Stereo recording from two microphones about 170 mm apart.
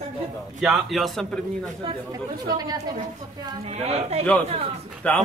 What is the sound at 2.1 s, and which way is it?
Speech, 20° right (ahead or behind).